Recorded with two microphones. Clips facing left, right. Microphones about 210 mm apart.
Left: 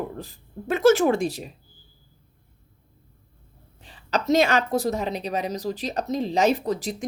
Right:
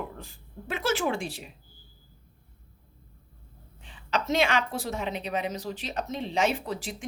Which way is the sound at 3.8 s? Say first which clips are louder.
Left 5 dB; 35° left (ahead or behind).